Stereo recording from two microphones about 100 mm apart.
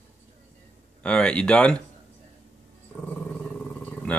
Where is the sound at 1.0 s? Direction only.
10° left (ahead or behind).